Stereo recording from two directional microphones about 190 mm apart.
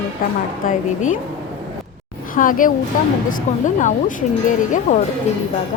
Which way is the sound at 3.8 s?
40° left (ahead or behind).